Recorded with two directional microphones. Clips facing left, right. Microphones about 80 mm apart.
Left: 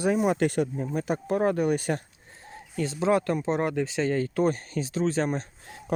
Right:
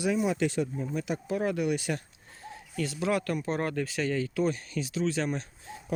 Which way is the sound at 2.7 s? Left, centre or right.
Left.